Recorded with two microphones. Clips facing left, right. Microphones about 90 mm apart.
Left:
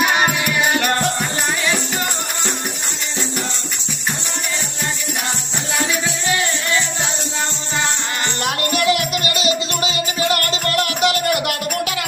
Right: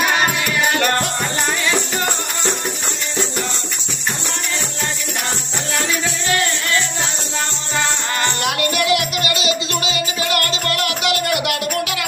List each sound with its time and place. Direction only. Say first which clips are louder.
0.0 s music: left 1 dB; 15° left (ahead or behind)
6.2 s music: right 1 dB; 15° left (ahead or behind)
8.4 s music: left 1 dB; 40° left (ahead or behind)
11.0 s a sound: left 2 dB; 40° left (ahead or behind)